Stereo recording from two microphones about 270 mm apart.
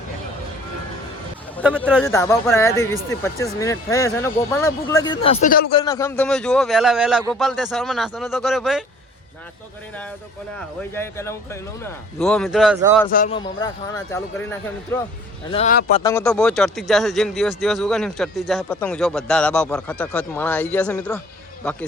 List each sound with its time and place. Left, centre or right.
1.6 s speech: centre
2.0 s speech: centre; by 5.6 s left
5.7 s speech: centre
10.9 s speech: centre
13.1 s speech: left
13.3 s speech: centre
15.4 s speech: left
16.0 s speech: centre